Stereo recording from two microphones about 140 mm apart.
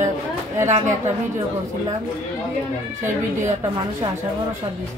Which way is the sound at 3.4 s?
25° right (ahead or behind).